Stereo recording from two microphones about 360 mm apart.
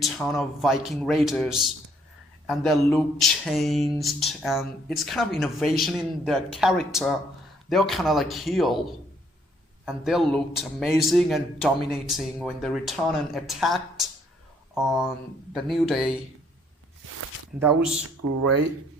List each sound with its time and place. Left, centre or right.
0.0 s a man's voice: centre
15.5 s a man's voice: centre
17.6 s a man's voice: centre
18.2 s speech: right